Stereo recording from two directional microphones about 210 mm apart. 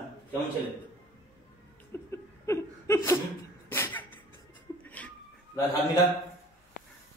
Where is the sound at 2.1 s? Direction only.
15° left (ahead or behind).